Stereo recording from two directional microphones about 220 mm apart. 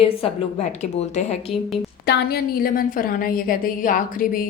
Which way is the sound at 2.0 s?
45° left (ahead or behind).